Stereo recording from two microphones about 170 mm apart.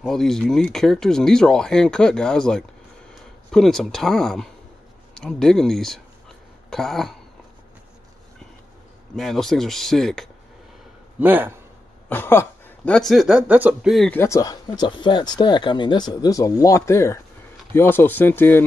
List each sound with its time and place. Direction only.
0.0 s speech: centre (ahead or behind)
9.1 s speech: centre (ahead or behind)
11.1 s speech: 10° right (ahead or behind)
12.1 s speech: 10° left (ahead or behind); by 13.9 s 10° right (ahead or behind)
13.9 s speech: 5° left (ahead or behind)
14.2 s speech: 20° left (ahead or behind)